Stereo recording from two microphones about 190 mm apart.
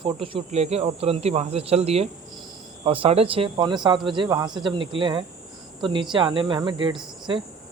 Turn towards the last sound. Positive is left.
turn(degrees=-25)  # may be behind; listen again after turning